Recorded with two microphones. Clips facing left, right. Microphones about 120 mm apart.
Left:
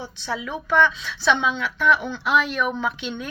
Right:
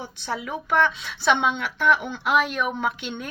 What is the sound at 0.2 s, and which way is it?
A woman's voice, 50° right (ahead or behind).